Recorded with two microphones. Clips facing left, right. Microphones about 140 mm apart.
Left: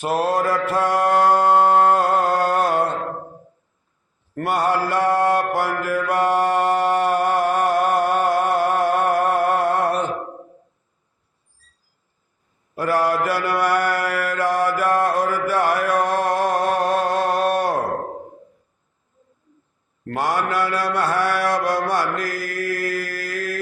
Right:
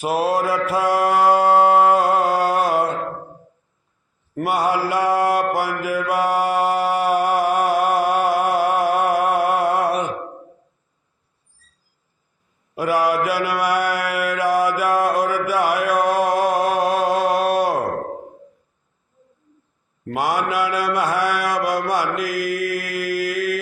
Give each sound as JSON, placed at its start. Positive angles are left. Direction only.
{"t": 0.0, "sound": "mantra", "side_deg": -10}
{"t": 4.4, "sound": "mantra", "side_deg": -10}
{"t": 12.7, "sound": "mantra", "side_deg": -10}
{"t": 20.1, "sound": "mantra", "side_deg": -10}